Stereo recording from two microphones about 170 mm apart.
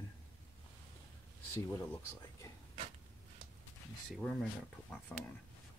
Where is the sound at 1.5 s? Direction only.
15° left (ahead or behind).